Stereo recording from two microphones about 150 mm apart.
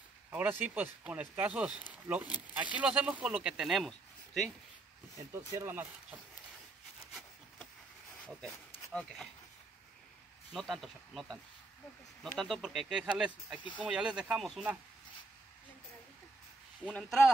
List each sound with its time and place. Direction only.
0.3 s speech: 10° right (ahead or behind)
5.1 s speech: 20° right (ahead or behind)
8.9 s speech: 5° left (ahead or behind)
10.5 s speech: centre (ahead or behind)